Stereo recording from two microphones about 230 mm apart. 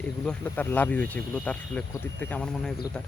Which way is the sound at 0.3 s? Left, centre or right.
Centre.